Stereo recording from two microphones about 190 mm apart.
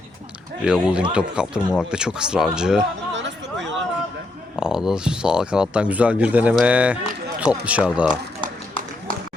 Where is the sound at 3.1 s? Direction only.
75° right (ahead or behind).